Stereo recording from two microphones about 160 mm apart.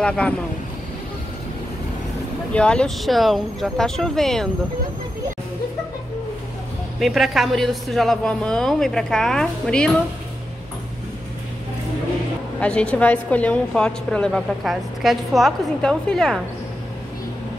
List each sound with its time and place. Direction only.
2.5 s a woman's voice: 5° left (ahead or behind)
7.0 s a woman's voice: centre (ahead or behind)
12.5 s a woman's voice: 5° left (ahead or behind)